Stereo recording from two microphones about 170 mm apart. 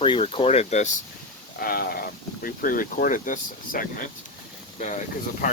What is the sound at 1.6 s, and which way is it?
Speech, 65° left (ahead or behind).